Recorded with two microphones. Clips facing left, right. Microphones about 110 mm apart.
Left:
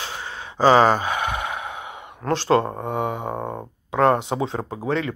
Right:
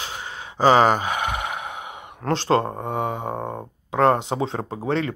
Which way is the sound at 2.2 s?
50° right (ahead or behind).